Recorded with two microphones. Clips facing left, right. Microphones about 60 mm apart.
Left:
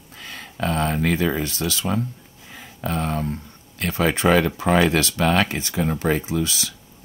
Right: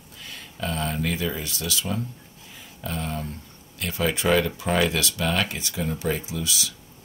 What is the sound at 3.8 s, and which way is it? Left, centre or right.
Speech, left.